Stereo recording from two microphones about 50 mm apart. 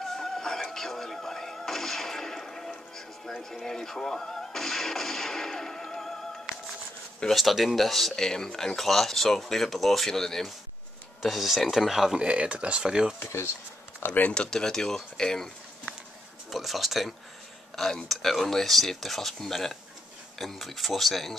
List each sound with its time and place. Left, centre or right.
0.0 s music: centre
3.3 s speech: centre
7.2 s speech: centre
12.2 s speech: right
13.3 s speech: left
14.0 s speech: left
14.3 s speech: centre
16.4 s speech: centre